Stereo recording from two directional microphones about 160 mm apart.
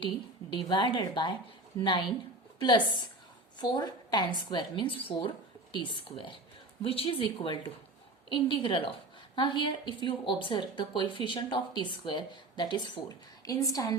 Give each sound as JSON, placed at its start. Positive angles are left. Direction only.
{"t": 0.5, "sound": "a woman's voice", "side_deg": 30}